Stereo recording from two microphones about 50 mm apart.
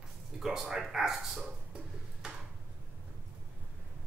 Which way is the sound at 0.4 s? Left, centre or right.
Centre.